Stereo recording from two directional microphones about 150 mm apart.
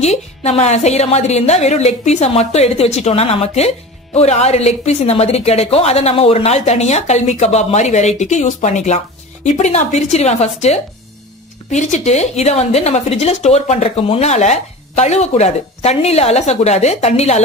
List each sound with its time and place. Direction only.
0.0 s a woman's voice: 45° left (ahead or behind)